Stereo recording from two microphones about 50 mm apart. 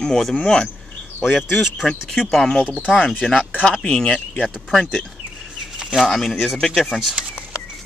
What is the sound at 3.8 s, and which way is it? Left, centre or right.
Speech, centre.